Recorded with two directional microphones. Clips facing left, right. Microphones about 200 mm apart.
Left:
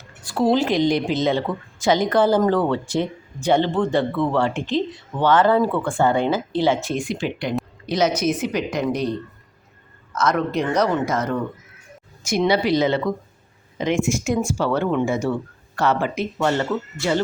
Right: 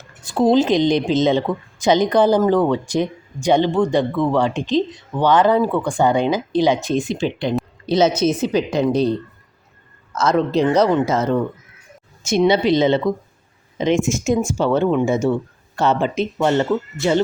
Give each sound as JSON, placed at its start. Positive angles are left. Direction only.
{"t": 0.2, "sound": "speech", "side_deg": -20}
{"t": 10.2, "sound": "speech", "side_deg": -25}
{"t": 12.4, "sound": "speech", "side_deg": -20}